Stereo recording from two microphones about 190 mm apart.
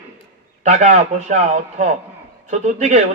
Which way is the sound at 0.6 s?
40° right (ahead or behind).